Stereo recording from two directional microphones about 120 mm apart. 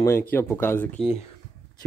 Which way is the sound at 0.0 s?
20° left (ahead or behind).